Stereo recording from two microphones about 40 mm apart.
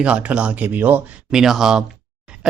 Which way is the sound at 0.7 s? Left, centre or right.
Right.